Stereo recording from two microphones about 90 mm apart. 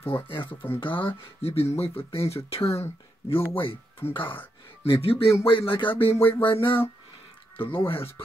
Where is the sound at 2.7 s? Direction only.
30° left (ahead or behind).